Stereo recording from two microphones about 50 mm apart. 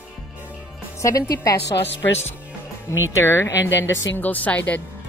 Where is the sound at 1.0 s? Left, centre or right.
Left.